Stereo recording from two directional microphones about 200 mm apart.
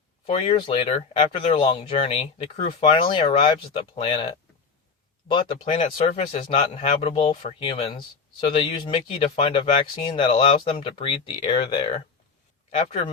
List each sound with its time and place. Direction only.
0.3 s speech: 25° left (ahead or behind)